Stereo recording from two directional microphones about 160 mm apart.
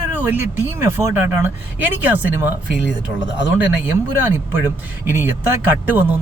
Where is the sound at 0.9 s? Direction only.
15° right (ahead or behind).